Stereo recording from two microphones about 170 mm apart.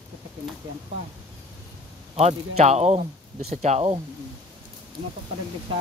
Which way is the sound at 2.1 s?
40° right (ahead or behind).